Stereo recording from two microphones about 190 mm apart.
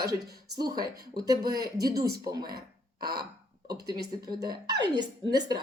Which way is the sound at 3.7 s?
20° right (ahead or behind).